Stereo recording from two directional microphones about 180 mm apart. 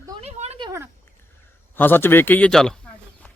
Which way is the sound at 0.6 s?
15° right (ahead or behind).